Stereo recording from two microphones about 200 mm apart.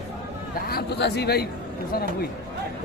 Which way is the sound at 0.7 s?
55° left (ahead or behind).